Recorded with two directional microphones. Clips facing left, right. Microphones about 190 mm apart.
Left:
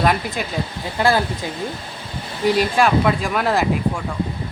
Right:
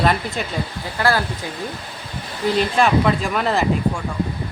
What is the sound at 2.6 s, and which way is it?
Speech, 5° left (ahead or behind).